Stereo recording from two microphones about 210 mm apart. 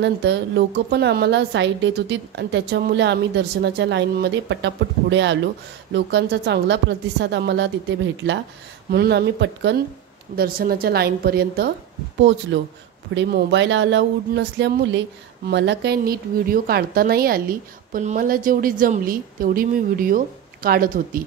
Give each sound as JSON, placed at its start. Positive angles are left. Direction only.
{"t": 0.0, "sound": "a woman's voice", "side_deg": -55}
{"t": 12.5, "sound": "a woman's voice", "side_deg": -60}